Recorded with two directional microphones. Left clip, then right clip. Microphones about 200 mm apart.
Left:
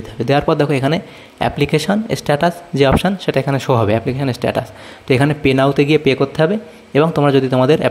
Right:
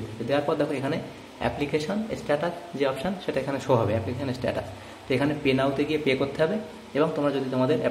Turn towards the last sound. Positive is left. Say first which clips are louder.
# left 12 dB
turn(degrees=50)  # may be behind; listen again after turning